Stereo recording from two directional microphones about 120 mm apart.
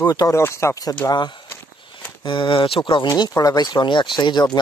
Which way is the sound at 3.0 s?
30° left (ahead or behind).